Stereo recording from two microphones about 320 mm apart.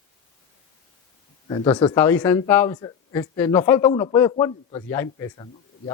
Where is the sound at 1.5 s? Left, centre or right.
Centre.